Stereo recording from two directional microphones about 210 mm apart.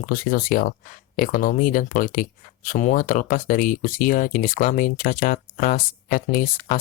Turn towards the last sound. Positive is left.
turn(degrees=40)  # may be behind; listen again after turning